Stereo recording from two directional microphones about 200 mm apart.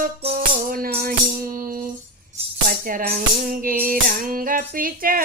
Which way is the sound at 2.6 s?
45° right (ahead or behind).